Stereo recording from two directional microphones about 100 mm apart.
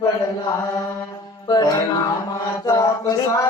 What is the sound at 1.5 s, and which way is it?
Speech, 40° left (ahead or behind).